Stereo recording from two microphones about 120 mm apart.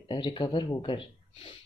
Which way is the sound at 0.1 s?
40° left (ahead or behind).